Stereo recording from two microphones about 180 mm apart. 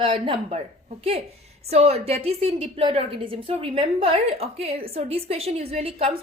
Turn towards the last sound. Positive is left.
turn(degrees=-35)  # may be behind; listen again after turning